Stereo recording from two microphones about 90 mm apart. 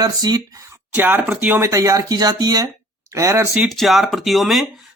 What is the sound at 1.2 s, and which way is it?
Speech, 10° right (ahead or behind).